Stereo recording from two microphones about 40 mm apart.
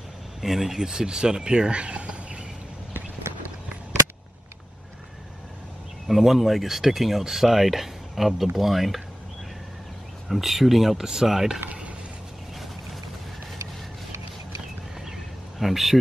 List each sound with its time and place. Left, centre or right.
0.4 s speech: centre; by 2.4 s right
6.0 s speech: centre
10.2 s speech: centre
15.6 s speech: centre